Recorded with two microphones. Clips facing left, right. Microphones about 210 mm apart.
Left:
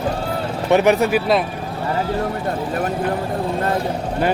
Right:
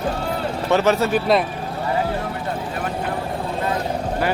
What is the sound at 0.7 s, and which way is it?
Speech, 15° left (ahead or behind).